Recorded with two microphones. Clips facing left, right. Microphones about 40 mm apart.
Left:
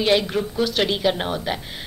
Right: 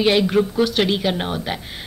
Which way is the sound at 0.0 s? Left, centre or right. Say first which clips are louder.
Right 3 dB; centre.